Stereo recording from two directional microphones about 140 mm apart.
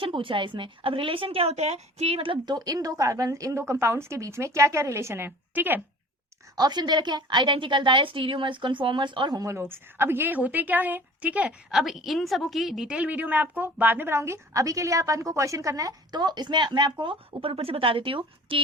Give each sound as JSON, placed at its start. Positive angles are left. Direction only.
{"t": 0.0, "sound": "a woman's voice", "side_deg": -40}
{"t": 6.6, "sound": "a woman's voice", "side_deg": -30}